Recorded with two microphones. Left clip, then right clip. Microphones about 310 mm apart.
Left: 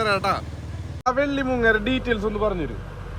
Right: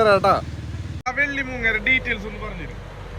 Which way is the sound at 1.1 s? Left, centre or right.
Centre.